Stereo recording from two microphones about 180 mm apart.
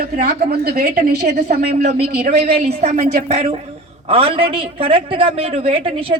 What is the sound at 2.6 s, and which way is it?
A man's voice, 35° right (ahead or behind).